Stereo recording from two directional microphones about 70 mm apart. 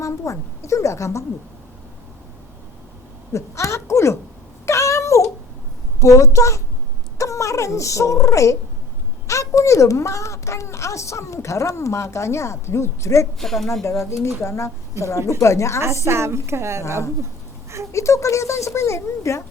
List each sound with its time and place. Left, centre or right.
0.0 s a child's voice: left
3.3 s a woman's voice: left
4.6 s a sound: left
6.0 s a child's voice: left
13.4 s speech: centre
14.0 s a child's voice: left
16.0 s a woman's voice: right
17.9 s a child's voice: left